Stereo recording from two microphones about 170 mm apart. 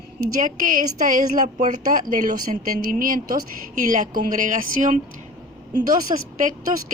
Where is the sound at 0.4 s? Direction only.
50° right (ahead or behind).